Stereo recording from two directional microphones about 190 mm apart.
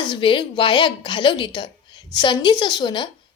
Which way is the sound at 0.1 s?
25° left (ahead or behind).